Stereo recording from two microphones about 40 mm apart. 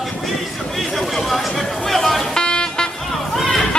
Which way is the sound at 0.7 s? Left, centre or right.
Centre.